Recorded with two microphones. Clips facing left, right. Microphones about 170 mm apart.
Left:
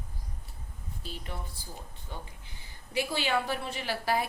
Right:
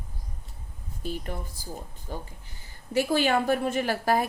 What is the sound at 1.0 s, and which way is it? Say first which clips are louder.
A woman's voice: right 8 dB; 50° right (ahead or behind).